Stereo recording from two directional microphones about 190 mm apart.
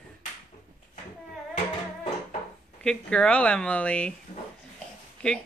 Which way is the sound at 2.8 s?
5° left (ahead or behind).